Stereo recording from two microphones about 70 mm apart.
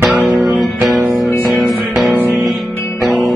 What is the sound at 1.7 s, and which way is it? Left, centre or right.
Music, centre.